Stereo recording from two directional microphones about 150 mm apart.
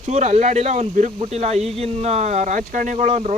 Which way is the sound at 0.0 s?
50° right (ahead or behind).